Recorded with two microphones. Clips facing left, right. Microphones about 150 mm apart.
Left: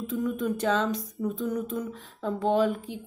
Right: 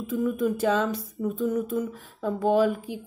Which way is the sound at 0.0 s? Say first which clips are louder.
Right 3 dB; 5° right (ahead or behind).